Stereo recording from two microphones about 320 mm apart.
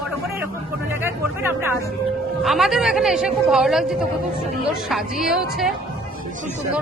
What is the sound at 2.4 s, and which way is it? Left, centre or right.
Speech, centre.